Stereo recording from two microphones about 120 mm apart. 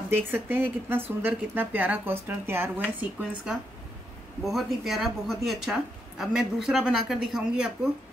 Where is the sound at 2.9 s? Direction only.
5° right (ahead or behind).